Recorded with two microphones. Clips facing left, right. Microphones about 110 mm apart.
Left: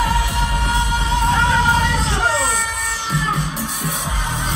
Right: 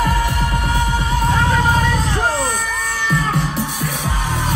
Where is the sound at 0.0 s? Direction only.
45° right (ahead or behind).